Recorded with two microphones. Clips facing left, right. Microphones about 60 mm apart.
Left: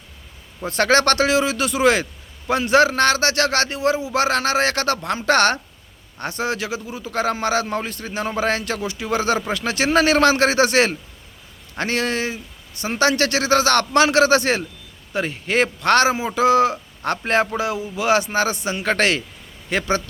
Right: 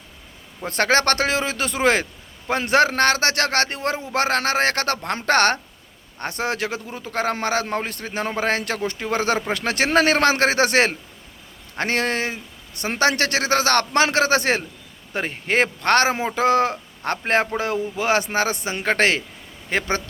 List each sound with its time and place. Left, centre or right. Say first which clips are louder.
0.7 s a man's voice: left 2 dB; right